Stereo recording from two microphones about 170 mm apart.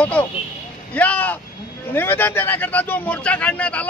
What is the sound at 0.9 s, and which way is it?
Speech, 10° left (ahead or behind).